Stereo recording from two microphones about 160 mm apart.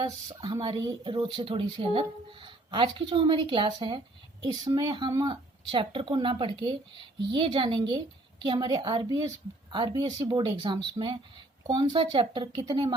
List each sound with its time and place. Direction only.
0.0 s a woman's voice: 25° right (ahead or behind)